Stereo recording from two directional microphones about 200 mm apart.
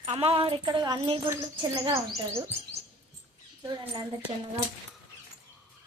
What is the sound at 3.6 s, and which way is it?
Speech, 20° right (ahead or behind).